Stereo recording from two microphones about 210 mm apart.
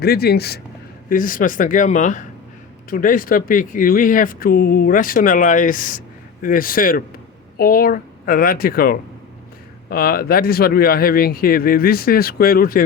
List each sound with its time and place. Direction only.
0.0 s speech: 50° left (ahead or behind)